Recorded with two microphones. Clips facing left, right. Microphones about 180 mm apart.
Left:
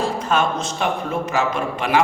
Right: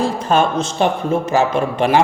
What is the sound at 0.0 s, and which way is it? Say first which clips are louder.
A man's voice: right 4 dB; 30° right (ahead or behind).